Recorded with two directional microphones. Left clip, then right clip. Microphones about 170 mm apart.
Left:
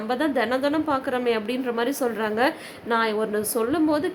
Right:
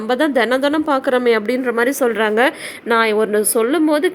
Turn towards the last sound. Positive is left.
turn(degrees=-30)  # may be behind; listen again after turning